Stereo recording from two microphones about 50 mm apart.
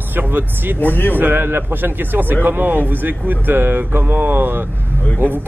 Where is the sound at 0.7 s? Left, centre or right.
Left.